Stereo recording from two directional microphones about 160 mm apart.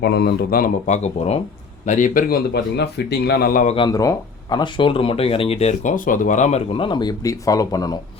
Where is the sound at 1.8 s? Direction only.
50° left (ahead or behind).